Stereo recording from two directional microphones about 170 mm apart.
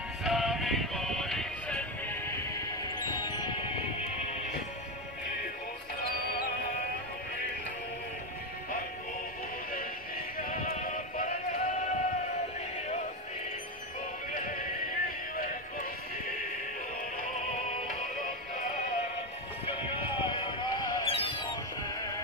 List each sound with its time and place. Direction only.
0.2 s music: centre (ahead or behind); by 3.7 s 30° left (ahead or behind)
9.7 s synthetic singing: 55° left (ahead or behind)
14.3 s music: 55° left (ahead or behind)
19.8 s music: 30° left (ahead or behind)